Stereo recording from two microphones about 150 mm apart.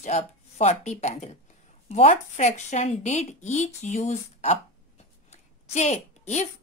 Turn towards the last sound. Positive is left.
turn(degrees=50)  # may be behind; listen again after turning